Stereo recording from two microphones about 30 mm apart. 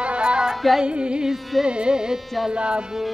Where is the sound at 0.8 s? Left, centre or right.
Right.